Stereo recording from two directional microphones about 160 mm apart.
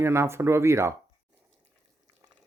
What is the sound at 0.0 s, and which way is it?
Speech, 15° right (ahead or behind).